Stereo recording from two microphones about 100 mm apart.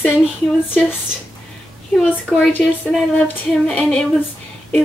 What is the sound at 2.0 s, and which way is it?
Speech, 15° left (ahead or behind).